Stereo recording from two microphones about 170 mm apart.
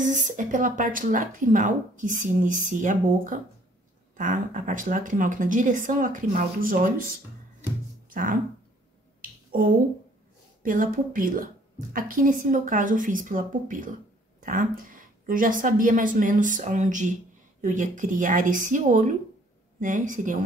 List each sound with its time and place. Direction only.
0.0 s speech: 50° right (ahead or behind)
8.1 s speech: 55° right (ahead or behind)
9.5 s speech: 55° right (ahead or behind)